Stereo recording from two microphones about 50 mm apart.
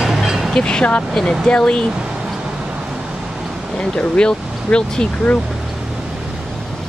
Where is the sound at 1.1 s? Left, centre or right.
Centre.